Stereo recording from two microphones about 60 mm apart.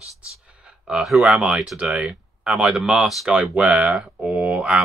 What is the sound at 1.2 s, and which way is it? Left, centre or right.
Speech, centre.